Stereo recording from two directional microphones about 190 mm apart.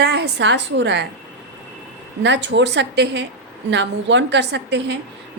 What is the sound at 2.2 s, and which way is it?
A woman's voice, 70° right (ahead or behind).